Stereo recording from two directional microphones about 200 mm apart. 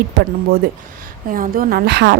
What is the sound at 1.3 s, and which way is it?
Speech, 45° right (ahead or behind).